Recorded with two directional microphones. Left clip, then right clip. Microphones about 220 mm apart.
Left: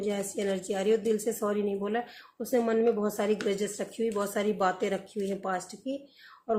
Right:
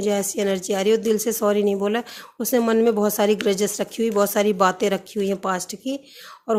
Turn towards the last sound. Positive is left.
turn(degrees=-45)  # may be behind; listen again after turning